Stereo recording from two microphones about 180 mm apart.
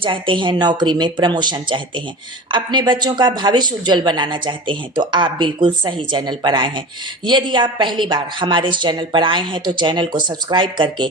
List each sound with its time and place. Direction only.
0.0 s speech: 30° right (ahead or behind)